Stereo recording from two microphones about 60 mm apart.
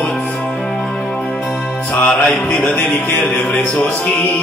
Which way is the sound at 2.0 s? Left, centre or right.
Left.